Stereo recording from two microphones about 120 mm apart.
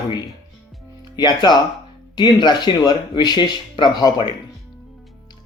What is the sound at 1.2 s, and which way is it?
Speech, 35° left (ahead or behind).